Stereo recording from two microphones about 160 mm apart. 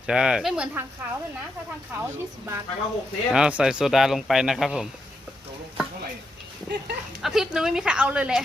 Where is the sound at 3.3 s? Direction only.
5° right (ahead or behind).